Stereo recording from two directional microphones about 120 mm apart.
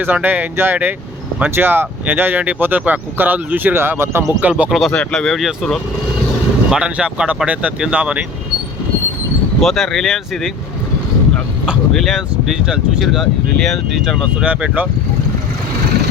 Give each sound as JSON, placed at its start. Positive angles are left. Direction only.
{"t": 0.0, "sound": "speech", "side_deg": -15}
{"t": 4.9, "sound": "speech", "side_deg": 5}
{"t": 9.6, "sound": "speech", "side_deg": 0}
{"t": 11.6, "sound": "speech", "side_deg": -5}
{"t": 14.4, "sound": "speech", "side_deg": -10}